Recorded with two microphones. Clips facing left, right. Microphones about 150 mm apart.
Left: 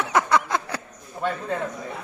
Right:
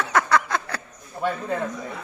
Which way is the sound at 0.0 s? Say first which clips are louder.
Even; 20° left (ahead or behind).